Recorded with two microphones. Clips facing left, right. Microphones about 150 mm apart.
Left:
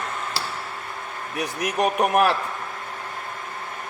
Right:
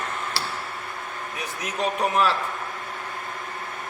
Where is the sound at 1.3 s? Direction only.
65° left (ahead or behind).